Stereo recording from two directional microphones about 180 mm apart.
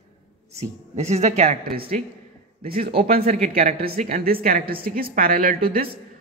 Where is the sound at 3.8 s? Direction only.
55° right (ahead or behind).